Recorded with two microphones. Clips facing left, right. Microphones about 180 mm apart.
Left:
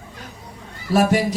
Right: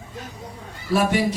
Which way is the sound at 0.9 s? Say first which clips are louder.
Left 3 dB; 40° left (ahead or behind).